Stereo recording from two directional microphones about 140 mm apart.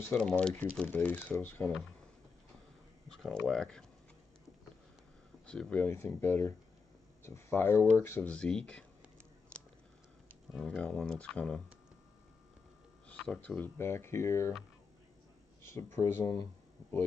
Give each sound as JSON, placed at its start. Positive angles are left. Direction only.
{"t": 0.0, "sound": "speech", "side_deg": 5}
{"t": 3.1, "sound": "speech", "side_deg": 5}
{"t": 5.5, "sound": "speech", "side_deg": 10}
{"t": 9.5, "sound": "a sound", "side_deg": 10}
{"t": 10.5, "sound": "speech", "side_deg": 5}
{"t": 13.2, "sound": "speech", "side_deg": 5}
{"t": 15.6, "sound": "speech", "side_deg": 20}